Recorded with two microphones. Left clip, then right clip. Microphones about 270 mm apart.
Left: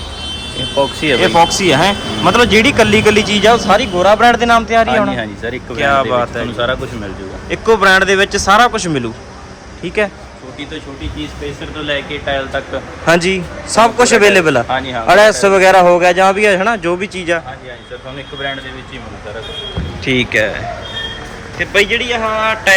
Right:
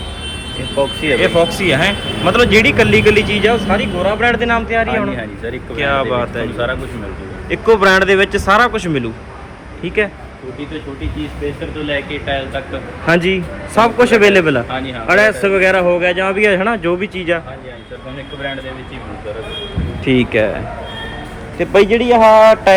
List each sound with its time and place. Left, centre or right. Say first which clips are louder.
0.8 s speech: left 2 dB; left
1.2 s speech: left 4 dB; centre
7.5 s speech: left 1 dB; centre
13.1 s speech: left 2 dB; centre
20.1 s speech: even; centre
21.6 s speech: right 2 dB; centre